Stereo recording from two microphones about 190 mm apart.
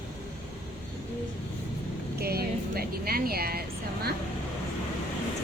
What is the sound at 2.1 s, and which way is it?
Speech, 55° right (ahead or behind).